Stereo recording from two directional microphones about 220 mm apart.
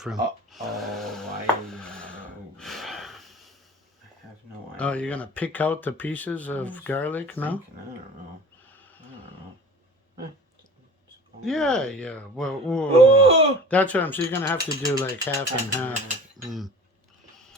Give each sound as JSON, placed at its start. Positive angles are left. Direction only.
{"t": 0.0, "sound": "a sound", "side_deg": 0}
{"t": 2.6, "sound": "gasp", "side_deg": 0}
{"t": 4.8, "sound": "speech", "side_deg": 5}
{"t": 11.4, "sound": "speech", "side_deg": 0}
{"t": 12.9, "sound": "speech", "side_deg": -30}
{"t": 13.7, "sound": "speech", "side_deg": 5}
{"t": 16.4, "sound": "cutlery", "side_deg": 0}